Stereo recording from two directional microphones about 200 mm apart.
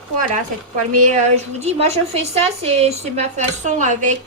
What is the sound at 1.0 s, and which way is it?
A woman's voice, 35° right (ahead or behind).